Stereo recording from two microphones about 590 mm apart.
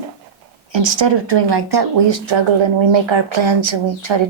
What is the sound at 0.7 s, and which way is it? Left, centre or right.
Speech, right.